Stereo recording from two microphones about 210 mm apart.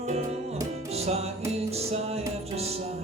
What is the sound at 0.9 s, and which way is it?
Music, 30° right (ahead or behind).